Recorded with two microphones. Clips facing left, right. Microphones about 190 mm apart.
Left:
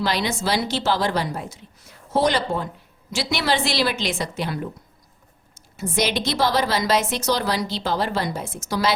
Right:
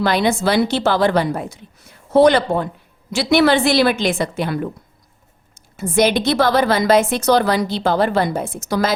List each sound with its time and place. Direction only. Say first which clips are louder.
0.0 s a woman's voice: right 7 dB; 55° right (ahead or behind)
5.7 s a woman's voice: right 7 dB; 55° right (ahead or behind)